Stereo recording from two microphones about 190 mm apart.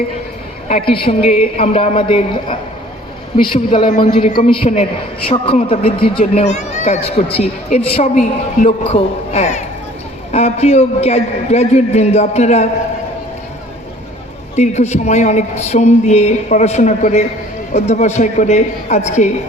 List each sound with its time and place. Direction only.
1.2 s a man's voice: 45° left (ahead or behind)
14.5 s a man's voice: 35° left (ahead or behind)